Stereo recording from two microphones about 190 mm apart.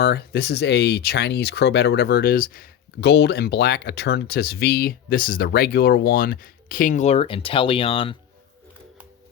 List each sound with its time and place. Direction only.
0.0 s speech: 55° left (ahead or behind); by 8.1 s 30° left (ahead or behind)